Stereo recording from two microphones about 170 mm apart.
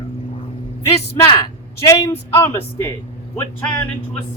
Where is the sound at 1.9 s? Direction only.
15° left (ahead or behind).